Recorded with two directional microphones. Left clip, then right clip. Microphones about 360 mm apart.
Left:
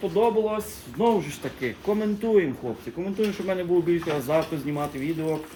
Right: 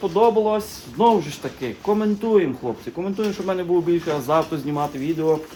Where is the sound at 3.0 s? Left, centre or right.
Centre.